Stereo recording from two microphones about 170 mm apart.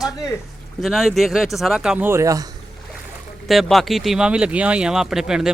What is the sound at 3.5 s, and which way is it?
Speech, centre (ahead or behind).